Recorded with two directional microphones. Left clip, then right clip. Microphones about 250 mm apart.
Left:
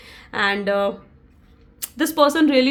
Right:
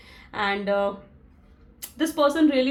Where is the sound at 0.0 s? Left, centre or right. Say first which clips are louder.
Left 6 dB; left.